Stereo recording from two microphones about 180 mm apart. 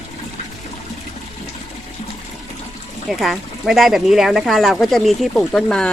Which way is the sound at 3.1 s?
Centre (ahead or behind).